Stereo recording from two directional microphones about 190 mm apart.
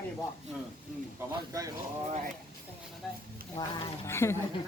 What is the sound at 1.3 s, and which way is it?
Speech, 15° right (ahead or behind).